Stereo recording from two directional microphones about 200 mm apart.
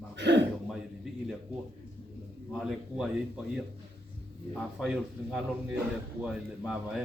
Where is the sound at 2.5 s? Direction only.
Centre (ahead or behind).